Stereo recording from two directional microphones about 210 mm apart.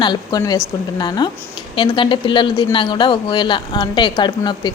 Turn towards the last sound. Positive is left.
turn(degrees=20)  # may be behind; listen again after turning